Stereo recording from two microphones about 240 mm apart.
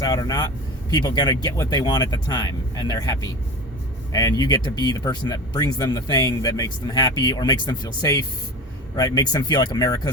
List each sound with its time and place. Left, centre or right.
0.0 s speech: centre